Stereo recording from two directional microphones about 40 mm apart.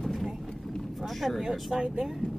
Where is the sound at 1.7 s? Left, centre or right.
Centre.